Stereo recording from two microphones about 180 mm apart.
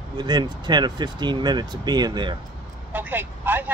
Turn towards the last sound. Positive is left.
turn(degrees=-10)  # may be behind; listen again after turning